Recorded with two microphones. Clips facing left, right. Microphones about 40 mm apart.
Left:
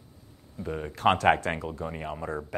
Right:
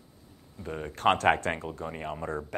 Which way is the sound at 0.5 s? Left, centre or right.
Centre.